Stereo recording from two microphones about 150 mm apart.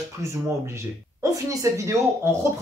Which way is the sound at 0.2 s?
20° right (ahead or behind).